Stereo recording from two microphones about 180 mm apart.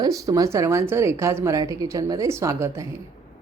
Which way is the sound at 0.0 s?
20° right (ahead or behind).